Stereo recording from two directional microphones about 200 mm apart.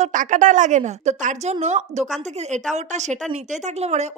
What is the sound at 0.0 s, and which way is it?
Speech, 40° right (ahead or behind).